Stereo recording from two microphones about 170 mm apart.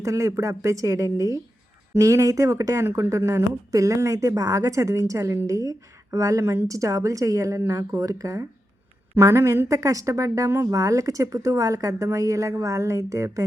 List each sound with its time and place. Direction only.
0.0 s speech: 20° right (ahead or behind)